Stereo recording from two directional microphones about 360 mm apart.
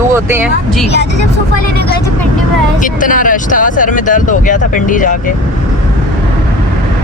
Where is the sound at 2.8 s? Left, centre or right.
Left.